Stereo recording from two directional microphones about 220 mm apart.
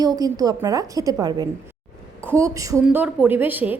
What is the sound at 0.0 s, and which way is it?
A woman's voice, 15° right (ahead or behind).